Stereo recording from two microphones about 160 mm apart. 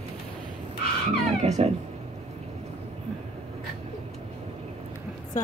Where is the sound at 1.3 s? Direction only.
45° right (ahead or behind).